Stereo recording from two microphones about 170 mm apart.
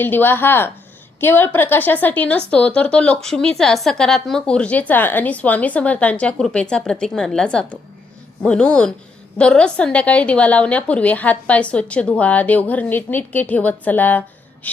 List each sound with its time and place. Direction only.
0.0 s a woman's voice: 10° left (ahead or behind)